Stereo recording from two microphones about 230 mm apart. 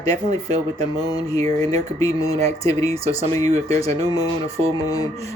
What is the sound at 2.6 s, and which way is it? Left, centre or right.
Speech, centre.